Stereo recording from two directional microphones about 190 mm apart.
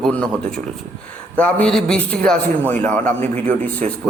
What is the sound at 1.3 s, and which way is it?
A man's voice, 5° left (ahead or behind).